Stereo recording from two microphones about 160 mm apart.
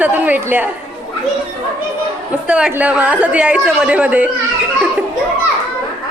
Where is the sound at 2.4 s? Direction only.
5° right (ahead or behind).